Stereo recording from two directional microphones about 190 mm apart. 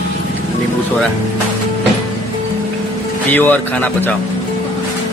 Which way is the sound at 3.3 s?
10° left (ahead or behind).